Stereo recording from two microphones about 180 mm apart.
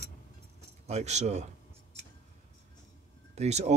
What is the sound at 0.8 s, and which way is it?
Speech, 35° right (ahead or behind).